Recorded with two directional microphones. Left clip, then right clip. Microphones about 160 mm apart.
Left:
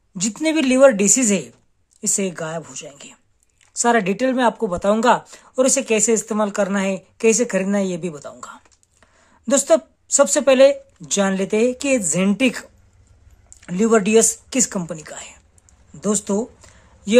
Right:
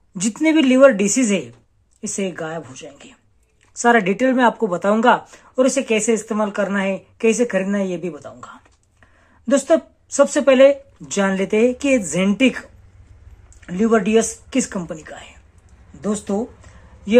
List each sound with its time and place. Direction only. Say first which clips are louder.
0.1 s speech: right 3 dB; 20° left (ahead or behind)
13.6 s speech: left 1 dB; 35° left (ahead or behind)